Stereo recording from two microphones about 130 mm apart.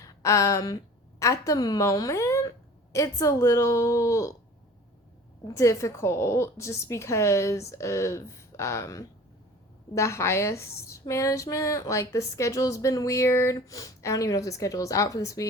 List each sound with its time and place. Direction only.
0.0 s a sound: 25° left (ahead or behind)
1.2 s a woman's voice: 25° left (ahead or behind)
5.5 s a woman's voice: 25° left (ahead or behind)